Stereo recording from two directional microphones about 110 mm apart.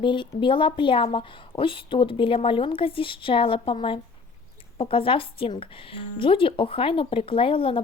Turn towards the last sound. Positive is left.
turn(degrees=55)  # may be behind; listen again after turning